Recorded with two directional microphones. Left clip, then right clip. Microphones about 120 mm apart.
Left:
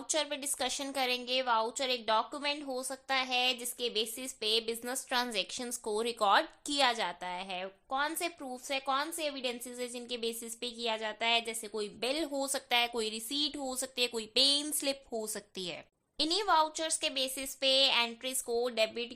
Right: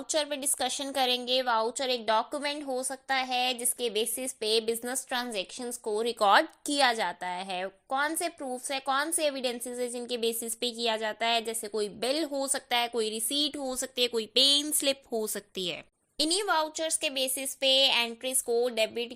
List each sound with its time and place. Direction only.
0.1 s a woman's voice: 35° right (ahead or behind)
2.6 s a woman's voice: 30° right (ahead or behind)
5.0 s speech: 15° right (ahead or behind)
6.1 s a woman's voice: 40° right (ahead or behind)
8.2 s a woman's voice: 25° right (ahead or behind)
12.3 s speech: 20° right (ahead or behind)
16.4 s speech: 15° right (ahead or behind)